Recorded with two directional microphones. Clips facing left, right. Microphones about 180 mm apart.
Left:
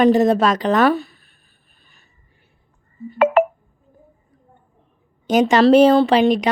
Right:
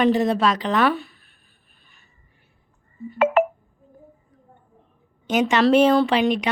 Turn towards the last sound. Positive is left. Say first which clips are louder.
# left 5 dB
turn(degrees=35)  # may be behind; listen again after turning